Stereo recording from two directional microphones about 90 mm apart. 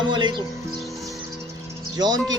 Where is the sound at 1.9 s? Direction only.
50° right (ahead or behind).